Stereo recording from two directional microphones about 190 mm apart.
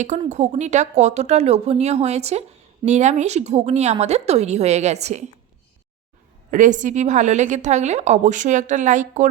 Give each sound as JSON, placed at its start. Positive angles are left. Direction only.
{"t": 0.3, "sound": "a woman's voice", "side_deg": -40}
{"t": 6.5, "sound": "a woman's voice", "side_deg": -40}